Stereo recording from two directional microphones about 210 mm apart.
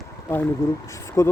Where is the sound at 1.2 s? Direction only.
15° left (ahead or behind).